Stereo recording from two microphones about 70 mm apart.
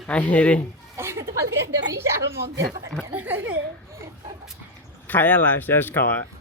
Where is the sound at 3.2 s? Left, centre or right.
Right.